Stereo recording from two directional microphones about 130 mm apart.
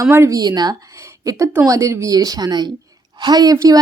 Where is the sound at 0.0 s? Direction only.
20° right (ahead or behind).